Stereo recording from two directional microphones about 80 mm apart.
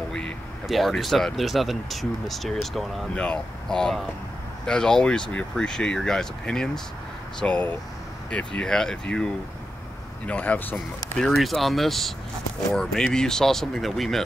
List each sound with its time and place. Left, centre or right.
0.7 s speech: centre; by 10.8 s left
11.1 s speech: centre